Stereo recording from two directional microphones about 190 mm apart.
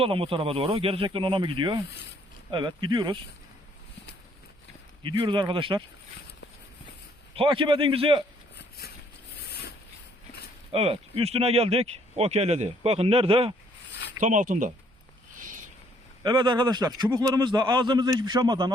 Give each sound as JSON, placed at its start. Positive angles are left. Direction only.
{"t": 0.0, "sound": "speech", "side_deg": -30}
{"t": 5.0, "sound": "speech", "side_deg": -25}
{"t": 7.3, "sound": "speech", "side_deg": -25}
{"t": 9.5, "sound": "a sound", "side_deg": 55}
{"t": 10.7, "sound": "speech", "side_deg": -30}
{"t": 14.2, "sound": "speech", "side_deg": -40}
{"t": 16.2, "sound": "speech", "side_deg": -25}